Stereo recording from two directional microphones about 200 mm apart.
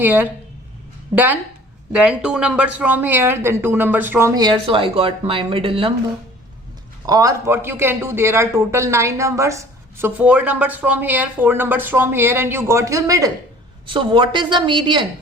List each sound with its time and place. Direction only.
0.0 s a man's voice: 10° right (ahead or behind); by 5.9 s 25° right (ahead or behind)
7.1 s a man's voice: 15° right (ahead or behind)